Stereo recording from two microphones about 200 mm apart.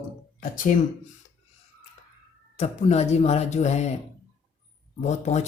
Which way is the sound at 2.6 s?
35° left (ahead or behind).